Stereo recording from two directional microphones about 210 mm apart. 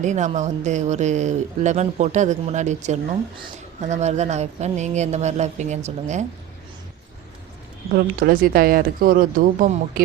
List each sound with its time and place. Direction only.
0.0 s speech: 35° right (ahead or behind)
7.9 s speech: 45° right (ahead or behind)